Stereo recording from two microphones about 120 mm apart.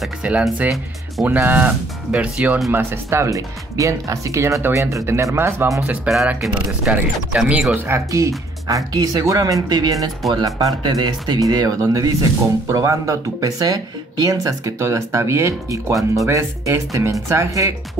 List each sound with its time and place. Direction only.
0.2 s speech: 10° right (ahead or behind)
5.8 s speech: 5° right (ahead or behind)
7.7 s speech: 20° right (ahead or behind)